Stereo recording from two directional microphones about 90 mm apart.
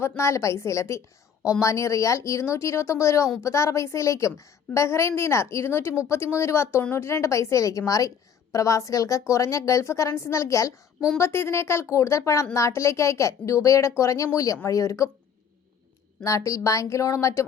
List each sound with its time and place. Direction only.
0.2 s speech: 35° left (ahead or behind)
16.2 s speech: 35° left (ahead or behind)